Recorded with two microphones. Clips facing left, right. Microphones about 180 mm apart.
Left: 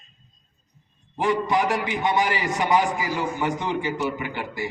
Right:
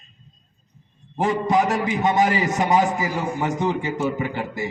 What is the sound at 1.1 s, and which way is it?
A man's voice, 45° right (ahead or behind).